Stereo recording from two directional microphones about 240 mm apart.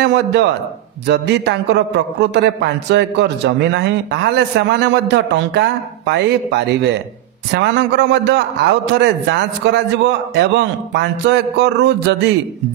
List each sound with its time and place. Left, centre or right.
0.0 s a man's voice: right